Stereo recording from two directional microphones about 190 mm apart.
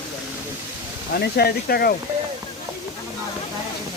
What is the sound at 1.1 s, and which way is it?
Speech, 55° left (ahead or behind).